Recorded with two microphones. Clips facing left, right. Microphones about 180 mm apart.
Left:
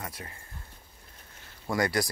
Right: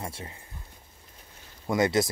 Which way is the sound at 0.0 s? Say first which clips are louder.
Right 3 dB; 25° right (ahead or behind).